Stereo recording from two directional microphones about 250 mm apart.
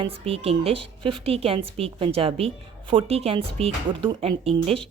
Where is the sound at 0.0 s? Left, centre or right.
Right.